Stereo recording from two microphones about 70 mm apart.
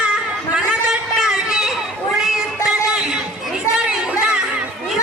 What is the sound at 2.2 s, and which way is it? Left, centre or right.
Music, centre.